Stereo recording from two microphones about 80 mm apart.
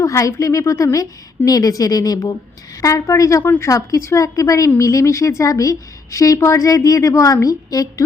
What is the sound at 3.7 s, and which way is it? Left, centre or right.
A woman's voice, left.